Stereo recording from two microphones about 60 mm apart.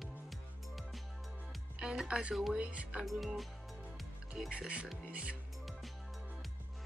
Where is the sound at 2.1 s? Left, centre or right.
Centre.